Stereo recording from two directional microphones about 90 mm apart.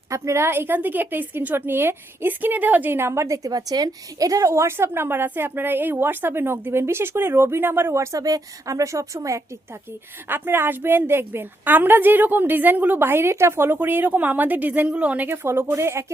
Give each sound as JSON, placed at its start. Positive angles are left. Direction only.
{"t": 0.1, "sound": "a woman's voice", "side_deg": -30}
{"t": 10.2, "sound": "a woman's voice", "side_deg": -25}